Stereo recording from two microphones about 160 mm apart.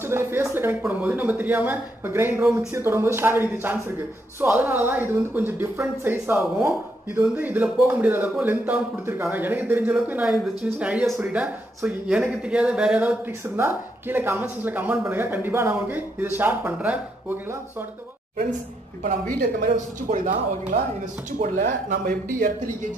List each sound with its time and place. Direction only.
0.0 s speech: 15° right (ahead or behind)
19.0 s speech: 65° right (ahead or behind)